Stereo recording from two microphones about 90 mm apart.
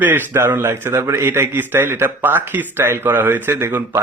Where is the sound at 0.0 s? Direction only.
25° right (ahead or behind).